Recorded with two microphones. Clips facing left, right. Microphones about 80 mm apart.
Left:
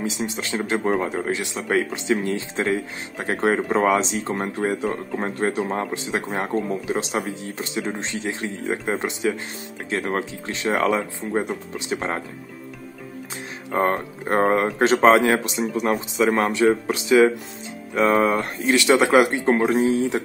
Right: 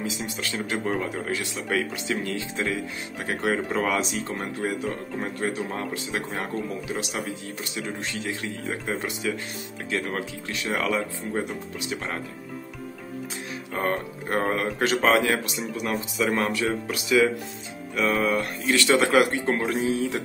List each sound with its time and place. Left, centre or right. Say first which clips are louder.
0.0 s speech: left 4 dB; left
13.7 s speech: left 6 dB; left
19.7 s speech: left 6 dB; left